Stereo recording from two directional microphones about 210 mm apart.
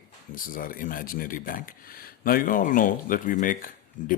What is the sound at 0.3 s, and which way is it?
Speech, 40° left (ahead or behind).